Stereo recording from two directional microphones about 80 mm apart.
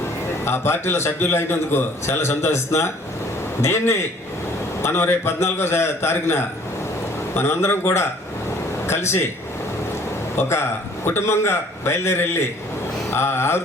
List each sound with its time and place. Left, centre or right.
0.4 s a man's voice: left
10.3 s a man's voice: left